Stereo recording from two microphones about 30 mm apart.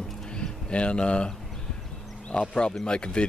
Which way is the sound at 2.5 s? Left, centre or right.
Left.